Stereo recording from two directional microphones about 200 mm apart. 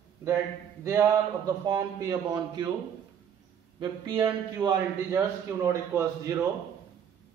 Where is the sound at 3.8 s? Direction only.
25° right (ahead or behind).